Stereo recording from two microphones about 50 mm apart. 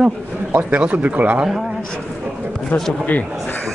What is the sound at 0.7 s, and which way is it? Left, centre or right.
Speech, right.